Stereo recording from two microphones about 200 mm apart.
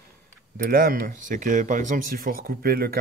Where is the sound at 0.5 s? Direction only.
45° right (ahead or behind).